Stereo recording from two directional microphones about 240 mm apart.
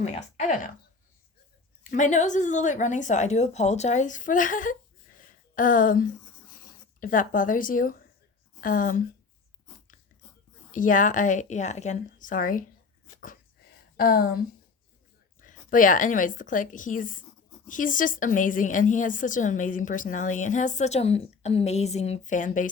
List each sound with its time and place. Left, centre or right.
0.0 s a woman's voice: left
1.8 s a woman's voice: left
10.7 s a woman's voice: left
13.1 s dog: left
13.9 s a woman's voice: left